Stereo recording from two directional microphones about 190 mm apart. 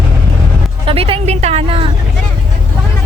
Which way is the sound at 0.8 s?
30° right (ahead or behind).